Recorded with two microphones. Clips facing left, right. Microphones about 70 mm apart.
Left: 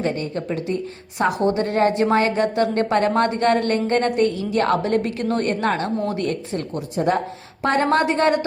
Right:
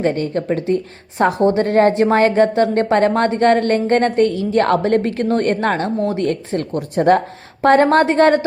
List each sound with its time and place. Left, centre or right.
0.0 s speech: right
6.2 s a woman's voice: right
7.6 s speech: right